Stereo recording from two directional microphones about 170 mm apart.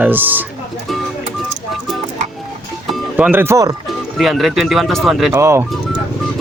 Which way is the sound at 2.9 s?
5° right (ahead or behind).